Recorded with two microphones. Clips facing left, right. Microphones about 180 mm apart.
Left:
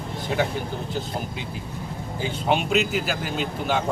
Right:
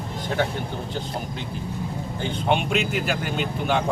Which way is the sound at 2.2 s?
Centre (ahead or behind).